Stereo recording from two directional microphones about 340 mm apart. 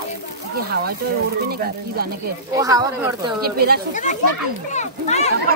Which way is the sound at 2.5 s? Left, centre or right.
Centre.